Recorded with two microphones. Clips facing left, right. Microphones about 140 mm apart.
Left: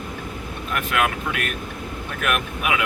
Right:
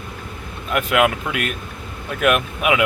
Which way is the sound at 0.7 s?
20° right (ahead or behind).